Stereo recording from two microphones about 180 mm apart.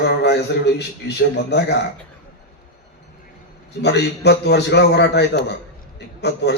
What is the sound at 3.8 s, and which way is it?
A man's voice, 70° left (ahead or behind).